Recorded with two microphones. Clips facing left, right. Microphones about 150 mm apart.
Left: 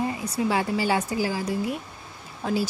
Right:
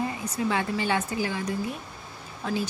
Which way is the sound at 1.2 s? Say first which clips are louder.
Left 3 dB; 35° left (ahead or behind).